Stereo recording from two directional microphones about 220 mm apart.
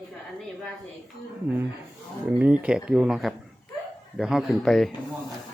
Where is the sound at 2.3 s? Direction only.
5° right (ahead or behind).